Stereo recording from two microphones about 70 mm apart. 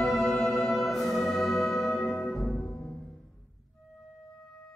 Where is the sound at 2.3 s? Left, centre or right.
Centre.